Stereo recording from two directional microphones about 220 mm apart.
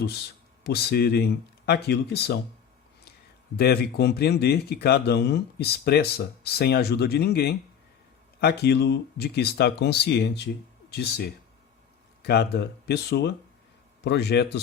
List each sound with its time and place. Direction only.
0.6 s a man's voice: 45° left (ahead or behind)
3.6 s a man's voice: 45° left (ahead or behind)